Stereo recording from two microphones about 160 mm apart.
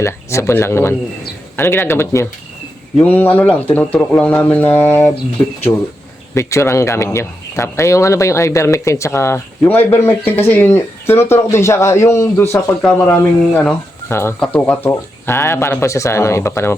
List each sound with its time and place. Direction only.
0.0 s speech: 15° left (ahead or behind)
12.8 s speech: 10° left (ahead or behind)